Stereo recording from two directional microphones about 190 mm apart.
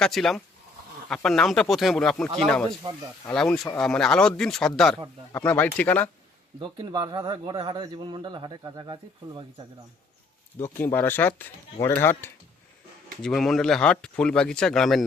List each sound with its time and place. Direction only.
0.0 s speech: centre (ahead or behind)
6.6 s speech: 25° right (ahead or behind)
10.6 s speech: 10° left (ahead or behind)
13.2 s speech: centre (ahead or behind)